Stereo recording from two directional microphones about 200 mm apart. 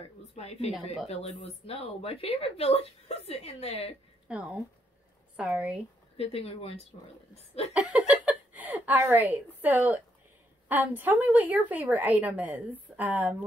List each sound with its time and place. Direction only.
0.3 s speech: 30° left (ahead or behind)
4.3 s a woman's voice: 5° right (ahead or behind)
6.1 s speech: 30° left (ahead or behind)
7.7 s a sound: 5° right (ahead or behind)
10.7 s a woman's voice: 10° right (ahead or behind)